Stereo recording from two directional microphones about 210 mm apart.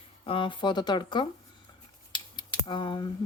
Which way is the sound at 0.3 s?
25° left (ahead or behind).